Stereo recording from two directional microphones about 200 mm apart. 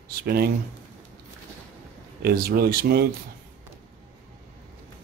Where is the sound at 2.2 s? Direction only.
50° right (ahead or behind).